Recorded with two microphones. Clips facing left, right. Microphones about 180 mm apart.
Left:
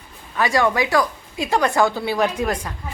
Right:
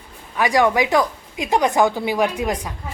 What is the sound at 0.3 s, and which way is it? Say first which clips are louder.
A woman's voice: right 2 dB; 15° right (ahead or behind).